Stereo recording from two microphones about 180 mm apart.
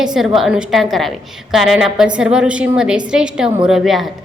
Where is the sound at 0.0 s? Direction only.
Centre (ahead or behind).